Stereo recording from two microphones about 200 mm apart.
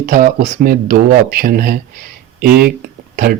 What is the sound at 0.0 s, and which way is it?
Speech, 40° right (ahead or behind).